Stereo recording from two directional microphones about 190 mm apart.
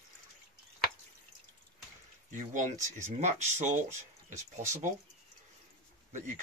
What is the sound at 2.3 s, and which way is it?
Speech, 40° right (ahead or behind).